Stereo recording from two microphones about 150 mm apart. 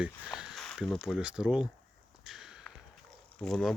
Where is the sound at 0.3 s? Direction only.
Centre (ahead or behind).